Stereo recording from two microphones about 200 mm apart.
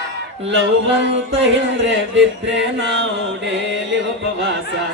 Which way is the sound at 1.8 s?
65° right (ahead or behind).